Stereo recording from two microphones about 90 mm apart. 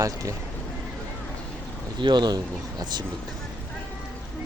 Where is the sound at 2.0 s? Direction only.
55° right (ahead or behind).